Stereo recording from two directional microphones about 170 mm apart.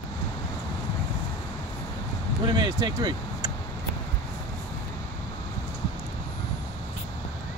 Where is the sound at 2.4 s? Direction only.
25° right (ahead or behind).